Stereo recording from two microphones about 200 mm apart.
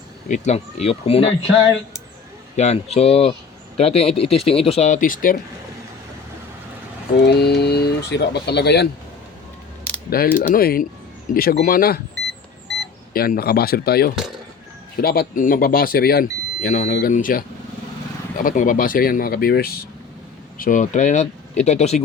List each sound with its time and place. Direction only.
0.3 s speech: 35° left (ahead or behind)
2.6 s speech: 35° left (ahead or behind)
7.3 s speech: 55° left (ahead or behind)
13.1 s speech: 50° left (ahead or behind)